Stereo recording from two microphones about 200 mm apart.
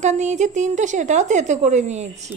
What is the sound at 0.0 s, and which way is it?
A woman's voice, 35° right (ahead or behind).